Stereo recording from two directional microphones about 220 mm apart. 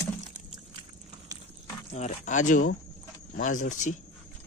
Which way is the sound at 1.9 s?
35° left (ahead or behind).